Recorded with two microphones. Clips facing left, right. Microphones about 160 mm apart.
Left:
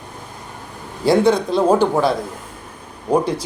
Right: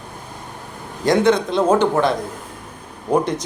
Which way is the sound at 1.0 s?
5° left (ahead or behind).